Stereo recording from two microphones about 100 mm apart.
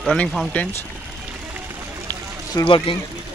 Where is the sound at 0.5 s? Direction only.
15° left (ahead or behind).